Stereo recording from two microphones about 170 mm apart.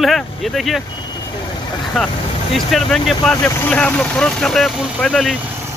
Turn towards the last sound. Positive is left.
turn(degrees=0)  # may be behind; listen again after turning